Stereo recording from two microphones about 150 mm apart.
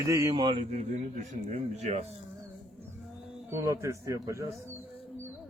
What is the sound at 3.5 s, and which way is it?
Speech, 20° right (ahead or behind).